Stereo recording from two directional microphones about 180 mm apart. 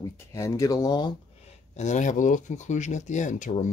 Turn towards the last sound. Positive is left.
turn(degrees=45)  # may be behind; listen again after turning